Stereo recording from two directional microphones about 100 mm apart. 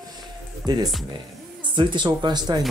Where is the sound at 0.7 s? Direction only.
45° right (ahead or behind).